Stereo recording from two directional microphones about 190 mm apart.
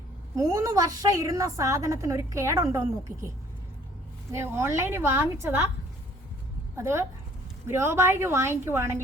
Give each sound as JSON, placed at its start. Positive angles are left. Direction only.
{"t": 0.3, "sound": "a woman's voice", "side_deg": -15}
{"t": 4.3, "sound": "a woman's voice", "side_deg": -15}
{"t": 6.7, "sound": "a woman's voice", "side_deg": -15}